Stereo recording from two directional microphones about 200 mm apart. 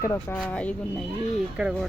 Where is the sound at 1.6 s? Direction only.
5° right (ahead or behind).